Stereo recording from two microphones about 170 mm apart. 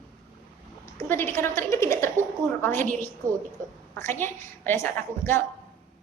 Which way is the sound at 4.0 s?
15° left (ahead or behind).